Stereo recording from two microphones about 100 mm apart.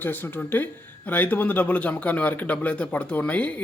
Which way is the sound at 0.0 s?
20° left (ahead or behind).